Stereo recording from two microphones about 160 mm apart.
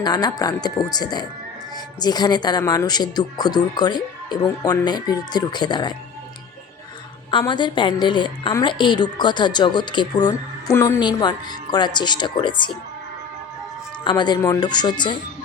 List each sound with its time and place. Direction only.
0.0 s a woman's voice: 25° left (ahead or behind)
7.3 s a woman's voice: 30° left (ahead or behind)
14.0 s a woman's voice: 30° left (ahead or behind)